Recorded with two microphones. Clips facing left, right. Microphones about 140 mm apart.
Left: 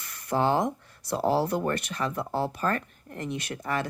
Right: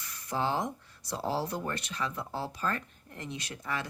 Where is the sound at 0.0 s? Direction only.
60° left (ahead or behind).